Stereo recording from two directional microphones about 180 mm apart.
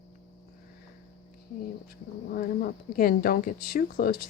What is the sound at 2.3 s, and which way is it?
Speech, 55° left (ahead or behind).